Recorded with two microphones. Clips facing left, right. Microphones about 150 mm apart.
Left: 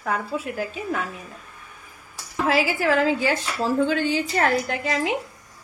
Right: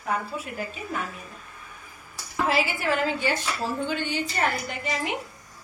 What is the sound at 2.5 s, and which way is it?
Speech, 90° left.